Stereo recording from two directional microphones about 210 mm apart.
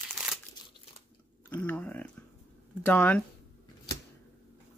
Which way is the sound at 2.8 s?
5° left (ahead or behind).